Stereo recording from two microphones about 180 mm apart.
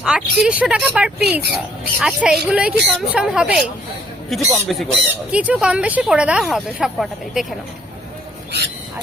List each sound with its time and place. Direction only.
0.0 s speech: 5° right (ahead or behind)
1.2 s speech: 65° right (ahead or behind)
2.0 s speech: 5° right (ahead or behind)